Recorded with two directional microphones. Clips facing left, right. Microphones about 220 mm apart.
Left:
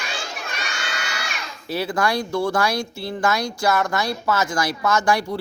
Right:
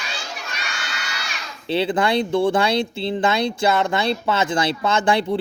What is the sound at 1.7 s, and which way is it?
Speech, 25° right (ahead or behind).